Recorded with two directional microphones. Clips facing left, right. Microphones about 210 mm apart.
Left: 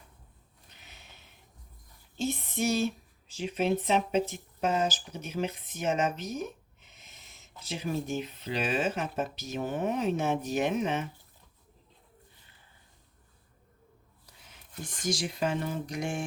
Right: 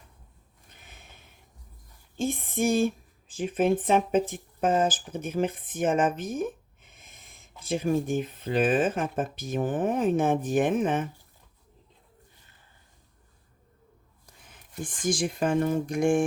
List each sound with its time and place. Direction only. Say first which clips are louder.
0.7 s a sound: right 3 dB; 50° right (ahead or behind)
2.1 s speech: right 3 dB; 50° right (ahead or behind)
14.4 s speech: right 6 dB; 50° right (ahead or behind)